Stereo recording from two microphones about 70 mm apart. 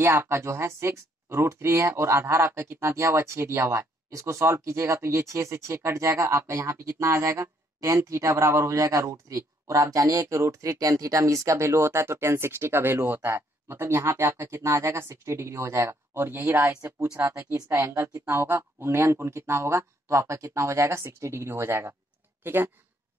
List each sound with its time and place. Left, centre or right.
0.2 s speech: right
17.7 s speech: right